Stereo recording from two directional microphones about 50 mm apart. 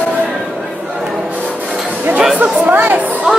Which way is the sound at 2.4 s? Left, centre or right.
Right.